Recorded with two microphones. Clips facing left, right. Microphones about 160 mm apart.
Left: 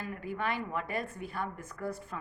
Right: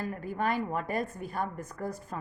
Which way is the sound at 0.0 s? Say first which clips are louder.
Right 4 dB; 40° right (ahead or behind).